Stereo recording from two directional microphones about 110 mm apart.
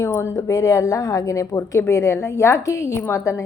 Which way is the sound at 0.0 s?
25° left (ahead or behind).